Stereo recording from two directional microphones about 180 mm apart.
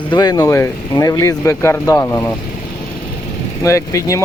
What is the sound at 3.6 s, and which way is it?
Speech, 15° left (ahead or behind).